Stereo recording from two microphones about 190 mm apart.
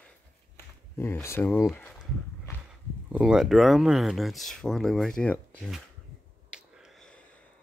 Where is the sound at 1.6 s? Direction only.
5° left (ahead or behind).